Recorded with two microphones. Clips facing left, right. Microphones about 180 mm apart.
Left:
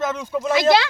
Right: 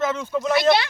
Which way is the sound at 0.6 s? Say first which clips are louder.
Left 2 dB; 90° left.